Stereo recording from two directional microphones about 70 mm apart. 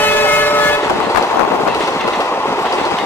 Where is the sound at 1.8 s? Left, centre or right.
Left.